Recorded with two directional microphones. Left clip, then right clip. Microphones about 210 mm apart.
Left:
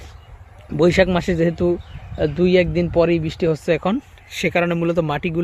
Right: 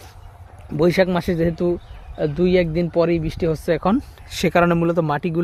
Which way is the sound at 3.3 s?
15° left (ahead or behind).